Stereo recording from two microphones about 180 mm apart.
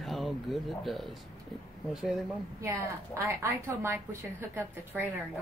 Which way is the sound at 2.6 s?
15° right (ahead or behind).